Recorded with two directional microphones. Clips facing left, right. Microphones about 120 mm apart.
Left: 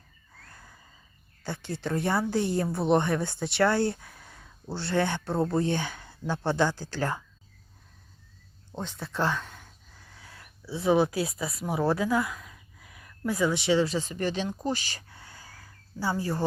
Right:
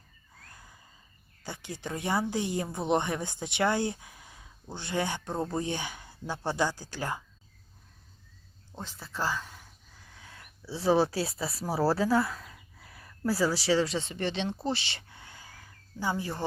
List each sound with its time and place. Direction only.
1.5 s speech: 15° right (ahead or behind)
9.1 s speech: 5° right (ahead or behind)
10.7 s speech: 30° right (ahead or behind)
14.8 s speech: 40° left (ahead or behind)
15.4 s a sound: 40° left (ahead or behind)
15.6 s a sound: 15° right (ahead or behind)